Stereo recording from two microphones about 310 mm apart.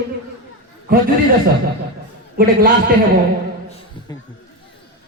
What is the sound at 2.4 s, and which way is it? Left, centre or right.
Speech, right.